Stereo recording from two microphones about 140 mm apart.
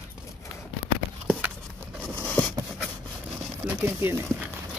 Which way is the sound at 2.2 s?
10° left (ahead or behind).